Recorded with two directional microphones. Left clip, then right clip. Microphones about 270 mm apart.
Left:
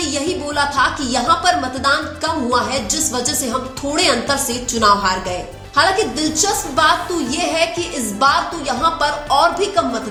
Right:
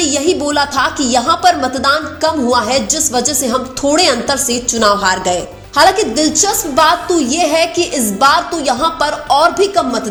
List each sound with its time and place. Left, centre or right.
0.0 s a woman's voice: right